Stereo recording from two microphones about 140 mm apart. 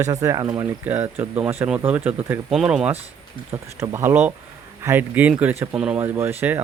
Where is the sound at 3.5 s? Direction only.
20° right (ahead or behind).